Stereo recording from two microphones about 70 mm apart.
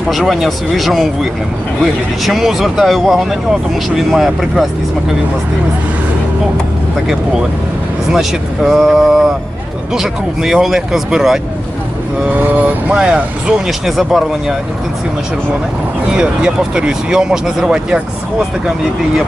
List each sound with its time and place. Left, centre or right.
0.1 s speech: centre
2.2 s speech: centre
8.1 s speech: centre
12.5 s speech: right
12.9 s speech: centre
16.2 s speech: centre